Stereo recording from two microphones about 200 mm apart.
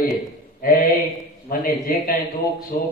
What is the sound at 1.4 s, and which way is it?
A man's voice, 45° left (ahead or behind).